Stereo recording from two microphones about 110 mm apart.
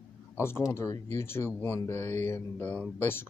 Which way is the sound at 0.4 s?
25° left (ahead or behind).